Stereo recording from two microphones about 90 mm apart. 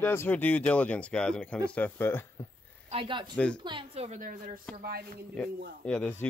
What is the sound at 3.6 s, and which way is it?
Speech, 60° right (ahead or behind).